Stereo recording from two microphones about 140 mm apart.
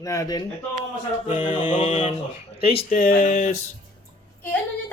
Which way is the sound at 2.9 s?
90° left.